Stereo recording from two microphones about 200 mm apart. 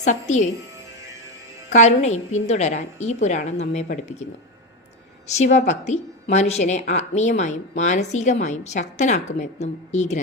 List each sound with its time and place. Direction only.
0.0 s a woman's voice: 35° left (ahead or behind)
1.7 s a woman's voice: 35° left (ahead or behind)
5.4 s a woman's voice: 35° left (ahead or behind)